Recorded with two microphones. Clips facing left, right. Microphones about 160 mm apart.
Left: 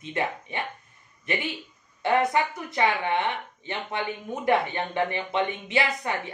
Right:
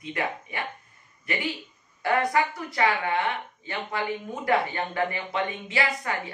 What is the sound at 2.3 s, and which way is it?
A woman's voice, 20° left (ahead or behind).